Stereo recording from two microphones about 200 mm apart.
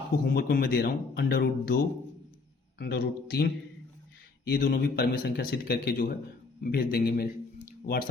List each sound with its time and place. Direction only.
0.3 s a man's voice: 45° left (ahead or behind)